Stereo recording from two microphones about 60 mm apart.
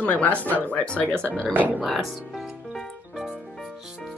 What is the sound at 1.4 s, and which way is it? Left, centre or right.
Speech, right.